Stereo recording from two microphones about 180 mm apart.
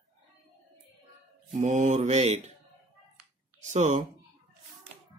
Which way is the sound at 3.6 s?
40° right (ahead or behind).